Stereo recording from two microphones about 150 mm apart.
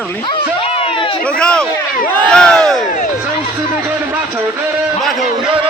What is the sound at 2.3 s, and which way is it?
Crowd, 5° left (ahead or behind).